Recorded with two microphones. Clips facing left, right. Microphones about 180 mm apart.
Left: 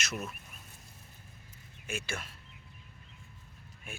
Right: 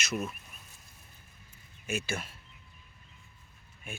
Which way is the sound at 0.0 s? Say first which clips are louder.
Right 4 dB; centre (ahead or behind).